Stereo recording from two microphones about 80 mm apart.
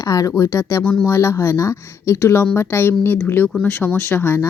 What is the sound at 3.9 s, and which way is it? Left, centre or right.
Speech, left.